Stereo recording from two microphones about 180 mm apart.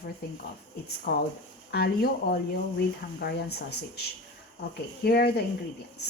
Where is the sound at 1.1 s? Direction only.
60° left (ahead or behind).